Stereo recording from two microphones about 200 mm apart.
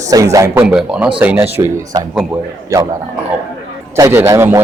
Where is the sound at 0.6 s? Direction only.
5° right (ahead or behind).